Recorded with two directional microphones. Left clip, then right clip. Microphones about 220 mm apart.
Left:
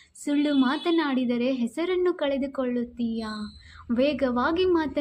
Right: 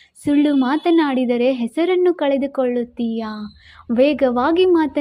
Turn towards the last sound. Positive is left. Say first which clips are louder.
# right 8 dB
turn(degrees=-30)  # may be behind; listen again after turning